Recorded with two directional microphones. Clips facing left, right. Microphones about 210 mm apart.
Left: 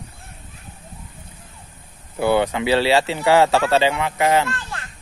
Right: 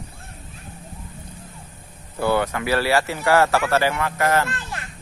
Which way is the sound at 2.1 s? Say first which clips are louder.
Left 3 dB; 15° left (ahead or behind).